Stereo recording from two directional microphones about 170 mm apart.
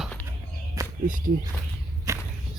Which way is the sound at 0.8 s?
20° right (ahead or behind).